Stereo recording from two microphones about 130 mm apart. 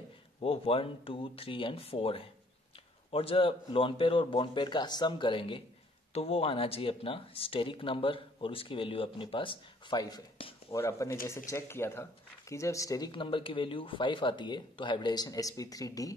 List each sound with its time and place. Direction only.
0.4 s speech: 45° left (ahead or behind); by 13.1 s 25° left (ahead or behind)
13.1 s speech: 40° left (ahead or behind)